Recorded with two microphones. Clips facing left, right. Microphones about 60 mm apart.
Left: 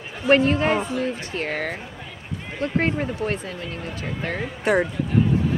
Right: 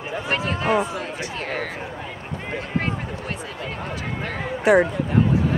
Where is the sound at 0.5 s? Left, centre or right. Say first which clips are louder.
Left 2 dB; left.